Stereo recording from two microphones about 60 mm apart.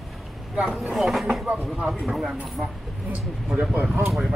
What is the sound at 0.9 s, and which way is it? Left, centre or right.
Speech, centre.